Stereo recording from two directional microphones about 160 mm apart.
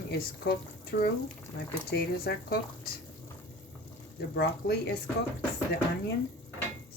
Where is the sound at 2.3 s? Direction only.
90° left.